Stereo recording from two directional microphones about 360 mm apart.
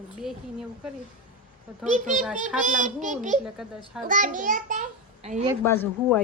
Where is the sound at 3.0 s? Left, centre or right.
Right.